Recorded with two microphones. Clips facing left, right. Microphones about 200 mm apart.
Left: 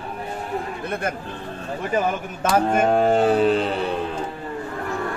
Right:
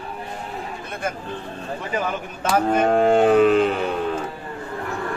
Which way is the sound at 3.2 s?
35° left (ahead or behind).